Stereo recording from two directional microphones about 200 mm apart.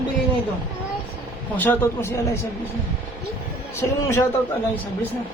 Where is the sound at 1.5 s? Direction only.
10° left (ahead or behind).